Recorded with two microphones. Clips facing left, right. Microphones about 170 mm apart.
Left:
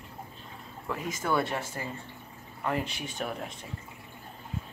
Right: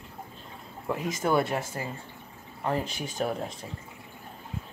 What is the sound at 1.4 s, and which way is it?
Speech, 40° right (ahead or behind).